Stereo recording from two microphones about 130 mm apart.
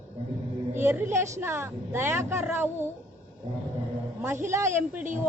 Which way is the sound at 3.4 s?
45° right (ahead or behind).